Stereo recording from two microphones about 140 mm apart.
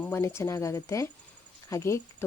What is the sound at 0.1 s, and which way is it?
Speech, 20° left (ahead or behind).